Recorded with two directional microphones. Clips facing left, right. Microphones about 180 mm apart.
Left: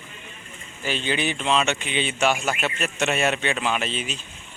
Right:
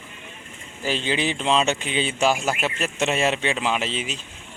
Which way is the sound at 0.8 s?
30° right (ahead or behind).